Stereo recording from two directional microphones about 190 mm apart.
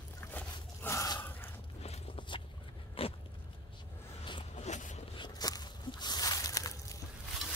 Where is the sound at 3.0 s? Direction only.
30° left (ahead or behind).